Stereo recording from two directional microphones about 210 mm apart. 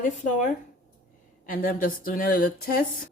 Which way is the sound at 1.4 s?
40° left (ahead or behind).